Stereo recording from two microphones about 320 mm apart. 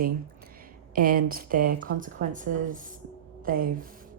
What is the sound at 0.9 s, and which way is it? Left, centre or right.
A woman's voice, right.